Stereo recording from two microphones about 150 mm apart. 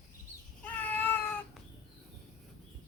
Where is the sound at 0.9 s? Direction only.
15° left (ahead or behind).